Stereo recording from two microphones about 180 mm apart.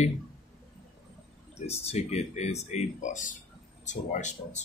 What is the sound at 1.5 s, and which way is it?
Speech, 35° left (ahead or behind).